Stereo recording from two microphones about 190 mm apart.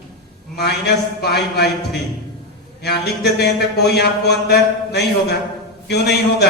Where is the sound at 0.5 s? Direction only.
60° left (ahead or behind).